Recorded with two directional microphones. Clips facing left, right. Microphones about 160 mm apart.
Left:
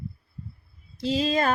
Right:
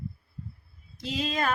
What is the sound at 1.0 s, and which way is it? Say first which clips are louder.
Speech: left 6 dB; 30° left (ahead or behind).